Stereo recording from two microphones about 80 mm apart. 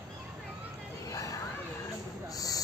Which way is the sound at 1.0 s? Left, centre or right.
Left.